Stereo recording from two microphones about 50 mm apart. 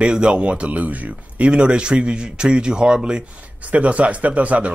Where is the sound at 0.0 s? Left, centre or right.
Right.